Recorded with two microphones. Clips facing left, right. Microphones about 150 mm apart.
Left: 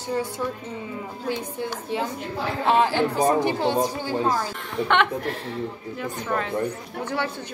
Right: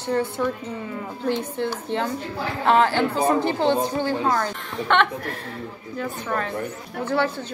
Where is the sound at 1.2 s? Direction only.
10° left (ahead or behind).